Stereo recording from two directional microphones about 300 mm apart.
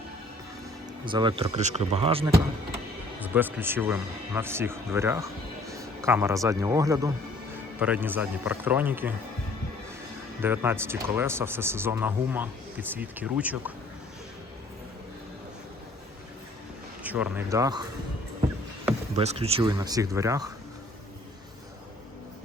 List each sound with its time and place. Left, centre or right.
1.0 s a man's voice: centre
10.4 s a man's voice: centre
17.0 s speech: centre
19.1 s speech: right